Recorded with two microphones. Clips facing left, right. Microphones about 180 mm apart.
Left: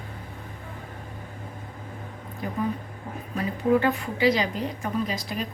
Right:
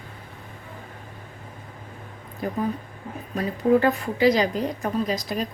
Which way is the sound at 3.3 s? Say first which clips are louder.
Right 3 dB; 40° right (ahead or behind).